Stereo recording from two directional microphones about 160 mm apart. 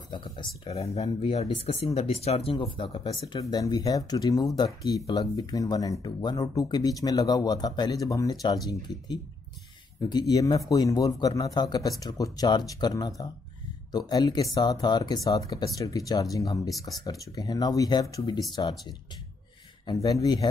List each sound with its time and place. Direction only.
0.1 s speech: 30° left (ahead or behind)
0.7 s speech: 40° left (ahead or behind); by 20.4 s 25° left (ahead or behind)